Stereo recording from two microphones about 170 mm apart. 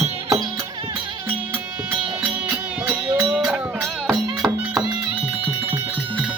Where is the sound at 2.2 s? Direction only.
10° right (ahead or behind).